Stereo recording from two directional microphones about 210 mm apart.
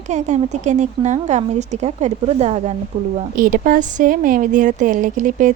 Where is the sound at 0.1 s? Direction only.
35° right (ahead or behind).